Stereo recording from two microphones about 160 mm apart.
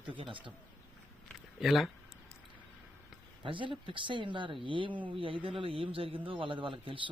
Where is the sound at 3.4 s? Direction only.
30° right (ahead or behind).